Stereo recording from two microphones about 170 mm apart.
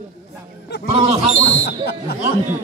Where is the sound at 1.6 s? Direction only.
70° left (ahead or behind).